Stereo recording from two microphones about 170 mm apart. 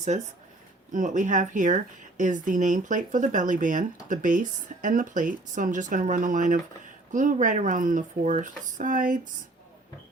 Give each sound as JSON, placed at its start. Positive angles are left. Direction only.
{"t": 0.1, "sound": "a woman's voice", "side_deg": -40}